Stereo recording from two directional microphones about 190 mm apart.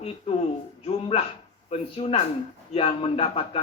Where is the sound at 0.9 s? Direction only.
30° left (ahead or behind).